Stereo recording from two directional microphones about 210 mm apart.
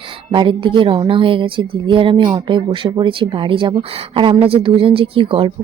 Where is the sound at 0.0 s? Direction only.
25° right (ahead or behind).